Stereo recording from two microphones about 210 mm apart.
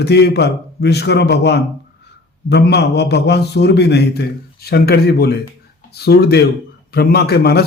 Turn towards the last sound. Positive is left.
turn(degrees=50)  # may be behind; listen again after turning